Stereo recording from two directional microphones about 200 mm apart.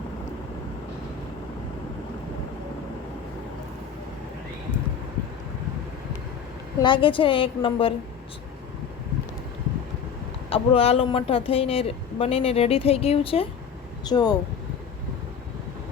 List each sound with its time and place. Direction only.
6.7 s speech: 25° left (ahead or behind)
10.5 s speech: 30° left (ahead or behind)